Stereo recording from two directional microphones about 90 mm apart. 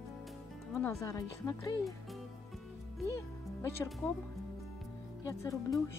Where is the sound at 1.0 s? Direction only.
40° left (ahead or behind).